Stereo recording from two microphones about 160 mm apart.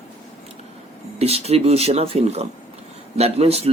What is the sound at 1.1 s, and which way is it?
Speech, 40° right (ahead or behind).